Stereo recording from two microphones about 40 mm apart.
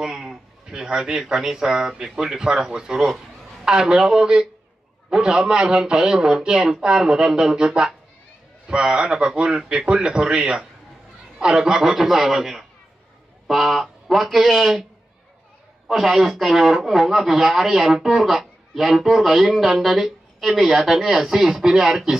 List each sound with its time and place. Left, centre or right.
0.0 s a sound: centre
0.7 s a man's voice: right
1.2 s a man's voice: centre
15.9 s speech: centre